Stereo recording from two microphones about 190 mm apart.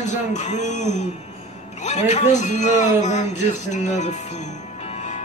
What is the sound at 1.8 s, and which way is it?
A man's voice, 35° left (ahead or behind).